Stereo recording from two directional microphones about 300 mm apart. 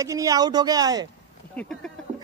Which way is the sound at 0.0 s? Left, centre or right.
Centre.